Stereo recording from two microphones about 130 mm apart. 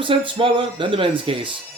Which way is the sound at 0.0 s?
40° right (ahead or behind).